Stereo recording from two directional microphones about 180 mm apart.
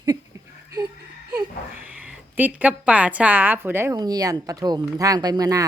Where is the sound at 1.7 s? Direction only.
10° right (ahead or behind).